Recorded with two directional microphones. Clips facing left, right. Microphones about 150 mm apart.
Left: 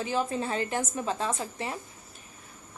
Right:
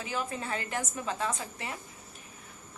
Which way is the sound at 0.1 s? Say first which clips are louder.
Left 4 dB; 30° left (ahead or behind).